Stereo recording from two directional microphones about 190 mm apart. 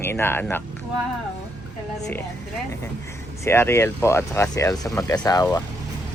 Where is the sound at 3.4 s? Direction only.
15° left (ahead or behind).